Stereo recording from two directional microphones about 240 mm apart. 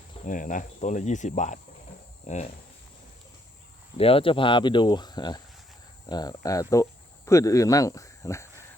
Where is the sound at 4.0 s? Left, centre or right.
Left.